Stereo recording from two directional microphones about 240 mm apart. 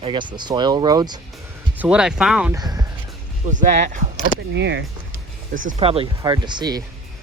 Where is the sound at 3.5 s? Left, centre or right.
Right.